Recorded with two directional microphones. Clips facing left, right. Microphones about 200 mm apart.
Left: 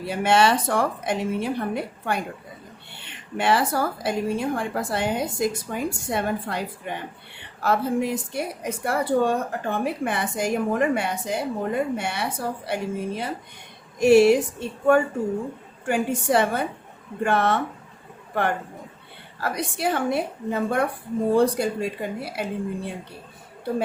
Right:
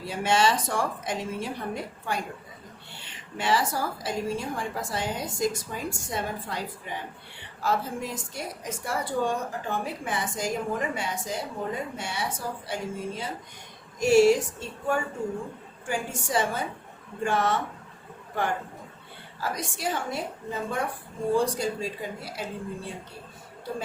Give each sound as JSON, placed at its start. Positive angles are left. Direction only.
{"t": 0.0, "sound": "a woman's voice", "side_deg": 60}
{"t": 19.4, "sound": "a woman's voice", "side_deg": 60}